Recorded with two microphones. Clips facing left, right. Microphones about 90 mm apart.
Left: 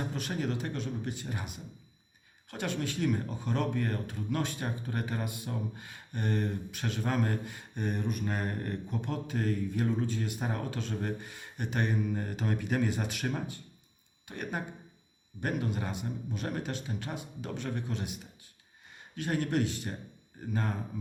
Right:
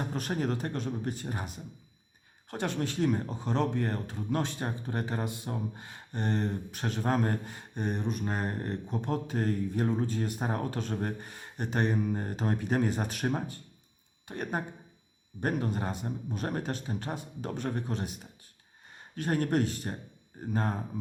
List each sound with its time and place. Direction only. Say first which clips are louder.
0.1 s speech: right 2 dB; 40° right (ahead or behind)